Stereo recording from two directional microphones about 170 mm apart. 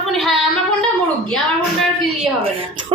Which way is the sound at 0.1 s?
Centre (ahead or behind).